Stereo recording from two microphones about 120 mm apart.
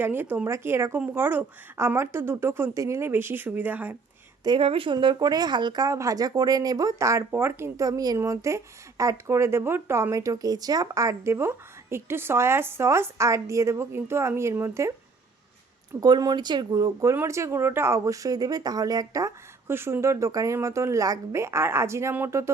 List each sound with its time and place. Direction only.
0.0 s a woman's voice: 15° right (ahead or behind)
4.4 s speech: 45° right (ahead or behind); by 14.9 s 25° right (ahead or behind)
16.0 s speech: 35° right (ahead or behind)